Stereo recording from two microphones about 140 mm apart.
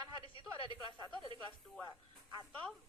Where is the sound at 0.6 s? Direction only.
35° right (ahead or behind).